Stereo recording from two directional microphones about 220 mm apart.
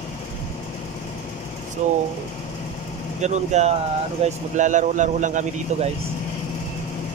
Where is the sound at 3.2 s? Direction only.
30° right (ahead or behind).